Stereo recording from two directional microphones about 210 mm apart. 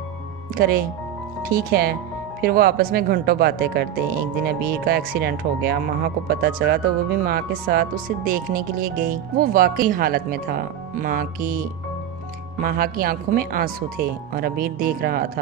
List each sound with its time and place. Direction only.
0.6 s speech: 45° right (ahead or behind)
12.6 s speech: 45° right (ahead or behind)